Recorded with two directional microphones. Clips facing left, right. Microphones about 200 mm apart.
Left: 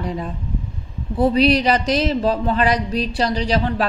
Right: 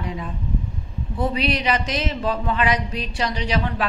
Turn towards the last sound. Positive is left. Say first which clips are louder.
# left 4 dB
turn(degrees=35)  # may be behind; listen again after turning